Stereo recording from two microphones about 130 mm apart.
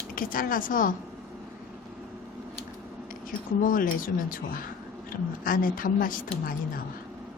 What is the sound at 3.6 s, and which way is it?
A woman's voice, 90° left.